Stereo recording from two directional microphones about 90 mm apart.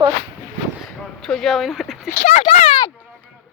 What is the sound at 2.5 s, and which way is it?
Speech, 70° left (ahead or behind).